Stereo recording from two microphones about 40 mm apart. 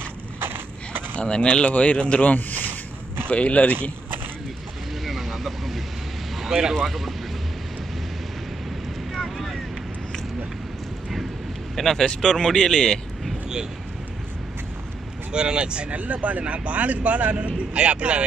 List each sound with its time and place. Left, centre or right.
0.4 s a sound: right
1.1 s speech: left
2.3 s a sound: left
3.3 s speech: left
5.0 s vehicle: centre
6.7 s speech: centre
9.1 s boat: centre
11.7 s speech: centre
15.3 s speech: right
15.9 s speech: right
17.7 s speech: right